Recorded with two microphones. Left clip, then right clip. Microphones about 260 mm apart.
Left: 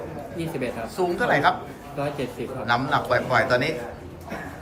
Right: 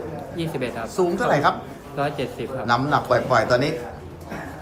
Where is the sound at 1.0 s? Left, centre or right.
Centre.